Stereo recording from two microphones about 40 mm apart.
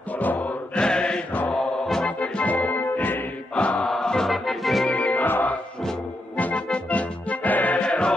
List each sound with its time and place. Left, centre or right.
0.1 s chant: left
0.7 s mantra: left
1.5 s music: centre
2.0 s music: left
2.4 s music: left
2.8 s music: left
3.5 s mantra: left
3.8 s music: centre
4.3 s music: centre
4.8 s music: left
5.2 s music: left
6.3 s music: left
7.8 s music: left